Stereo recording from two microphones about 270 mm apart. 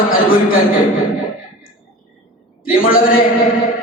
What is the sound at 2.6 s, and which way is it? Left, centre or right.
Speech, left.